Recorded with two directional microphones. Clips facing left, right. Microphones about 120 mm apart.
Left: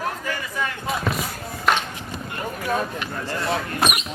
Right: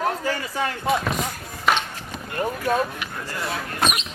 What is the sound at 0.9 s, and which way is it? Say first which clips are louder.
Basketball bounce: right 3 dB; centre (ahead or behind).